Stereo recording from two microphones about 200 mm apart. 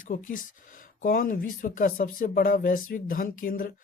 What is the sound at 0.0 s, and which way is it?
Speech, 40° left (ahead or behind).